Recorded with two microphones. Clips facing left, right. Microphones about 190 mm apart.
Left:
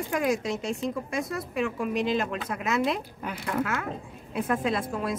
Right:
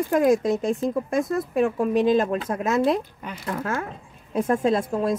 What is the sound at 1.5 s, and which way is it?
Speech, 35° right (ahead or behind).